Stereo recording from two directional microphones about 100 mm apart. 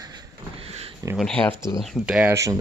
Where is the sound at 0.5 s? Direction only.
75° right (ahead or behind).